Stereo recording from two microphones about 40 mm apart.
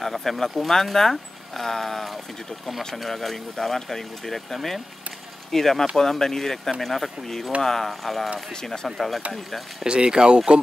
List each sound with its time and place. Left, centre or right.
0.0 s speech: centre
9.8 s speech: right